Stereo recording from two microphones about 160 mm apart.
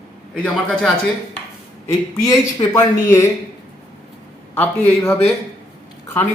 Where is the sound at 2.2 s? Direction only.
20° left (ahead or behind).